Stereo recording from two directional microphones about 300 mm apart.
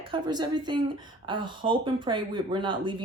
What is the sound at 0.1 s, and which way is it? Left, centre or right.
Speech, centre.